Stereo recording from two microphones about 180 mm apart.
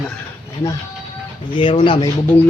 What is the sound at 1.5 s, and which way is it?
Speech, 30° left (ahead or behind).